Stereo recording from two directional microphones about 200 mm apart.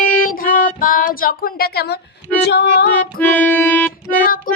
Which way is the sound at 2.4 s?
55° left (ahead or behind).